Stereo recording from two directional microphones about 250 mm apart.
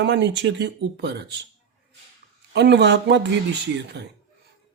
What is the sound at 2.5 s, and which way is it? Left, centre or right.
Speech, right.